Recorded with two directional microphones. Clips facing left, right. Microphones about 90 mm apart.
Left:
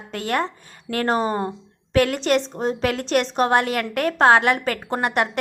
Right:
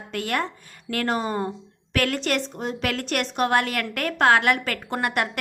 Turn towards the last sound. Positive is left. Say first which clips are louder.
# left 3 dB
turn(degrees=25)  # may be behind; listen again after turning